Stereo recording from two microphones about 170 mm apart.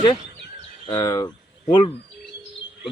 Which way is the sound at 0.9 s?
20° left (ahead or behind).